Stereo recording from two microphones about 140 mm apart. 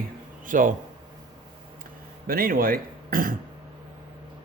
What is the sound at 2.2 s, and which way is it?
Speech, 90° right.